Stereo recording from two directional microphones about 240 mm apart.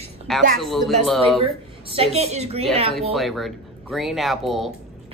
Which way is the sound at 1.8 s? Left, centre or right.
Right.